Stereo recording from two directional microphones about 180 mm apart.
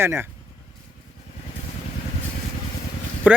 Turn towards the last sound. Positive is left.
turn(degrees=-10)  # may be behind; listen again after turning